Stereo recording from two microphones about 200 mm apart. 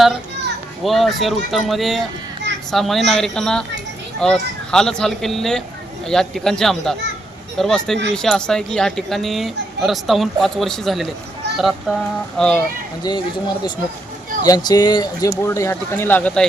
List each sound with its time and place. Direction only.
0.9 s speech: centre (ahead or behind)
13.0 s speech: 20° left (ahead or behind)
14.4 s speech: 20° left (ahead or behind)